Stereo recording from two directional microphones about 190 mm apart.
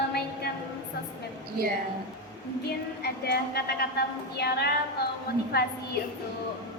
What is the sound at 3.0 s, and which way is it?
A woman's voice, 55° left (ahead or behind).